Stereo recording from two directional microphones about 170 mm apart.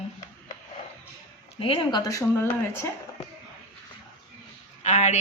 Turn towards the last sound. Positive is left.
turn(degrees=45)  # may be behind; listen again after turning